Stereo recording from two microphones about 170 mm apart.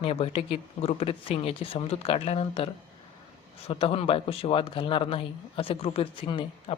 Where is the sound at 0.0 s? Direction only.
35° left (ahead or behind).